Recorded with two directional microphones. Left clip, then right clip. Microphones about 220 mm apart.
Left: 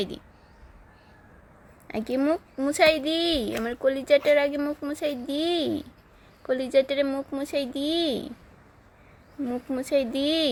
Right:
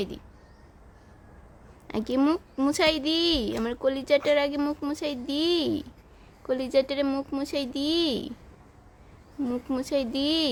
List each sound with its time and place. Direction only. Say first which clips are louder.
1.9 s speech: even; 15° right (ahead or behind)
9.7 s speech: left 4 dB; 10° right (ahead or behind)